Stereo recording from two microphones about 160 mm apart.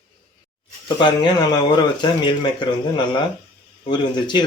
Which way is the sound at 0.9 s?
25° left (ahead or behind).